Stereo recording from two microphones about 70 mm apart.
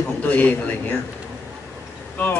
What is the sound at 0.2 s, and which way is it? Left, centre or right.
Speech, left.